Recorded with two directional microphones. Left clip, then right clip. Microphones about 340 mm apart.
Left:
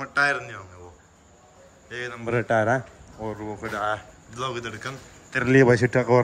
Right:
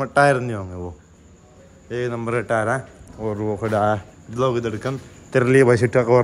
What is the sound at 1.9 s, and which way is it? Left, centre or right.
Speech, centre.